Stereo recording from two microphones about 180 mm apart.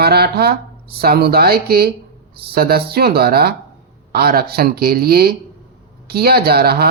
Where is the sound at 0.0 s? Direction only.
60° right (ahead or behind).